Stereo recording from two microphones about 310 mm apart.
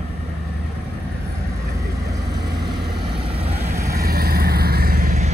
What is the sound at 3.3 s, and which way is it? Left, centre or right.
Vehicle, centre.